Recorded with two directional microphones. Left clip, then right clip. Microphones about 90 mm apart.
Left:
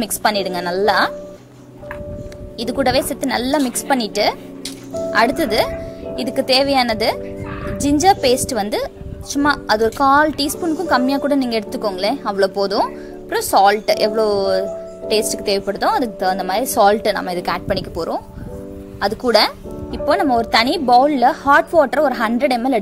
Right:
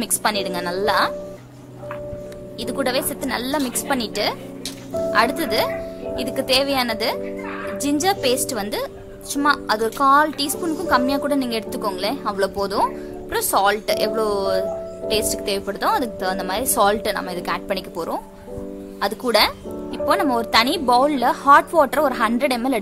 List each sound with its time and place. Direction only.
0.0 s a woman's voice: 60° left (ahead or behind)
2.6 s a woman's voice: 65° left (ahead or behind)
11.7 s speech: 40° left (ahead or behind)
12.0 s speech: 55° left (ahead or behind)
16.6 s speech: 35° left (ahead or behind)
17.0 s a woman's voice: 55° left (ahead or behind)
17.6 s speech: 35° left (ahead or behind)